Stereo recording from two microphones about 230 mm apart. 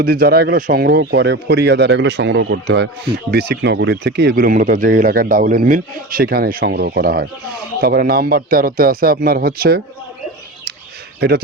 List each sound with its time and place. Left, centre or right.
0.0 s a man's voice: right